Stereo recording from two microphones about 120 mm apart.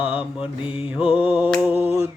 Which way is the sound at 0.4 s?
45° left (ahead or behind).